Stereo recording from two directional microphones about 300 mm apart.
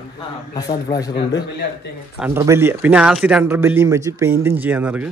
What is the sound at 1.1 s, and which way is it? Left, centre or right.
Speech, left.